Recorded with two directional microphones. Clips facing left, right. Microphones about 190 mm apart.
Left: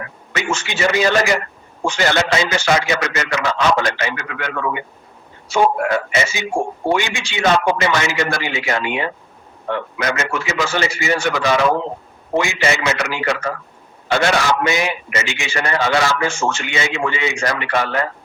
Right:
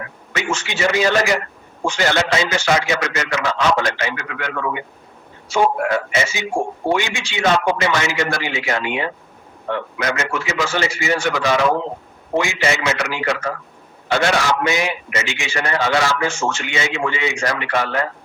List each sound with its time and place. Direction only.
0.3 s a man's voice: 55° left (ahead or behind)